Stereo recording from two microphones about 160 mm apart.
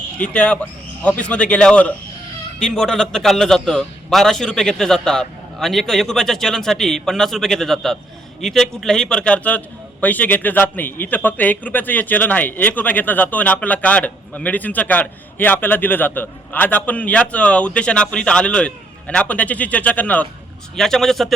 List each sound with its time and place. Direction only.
0.2 s a man's voice: 5° left (ahead or behind)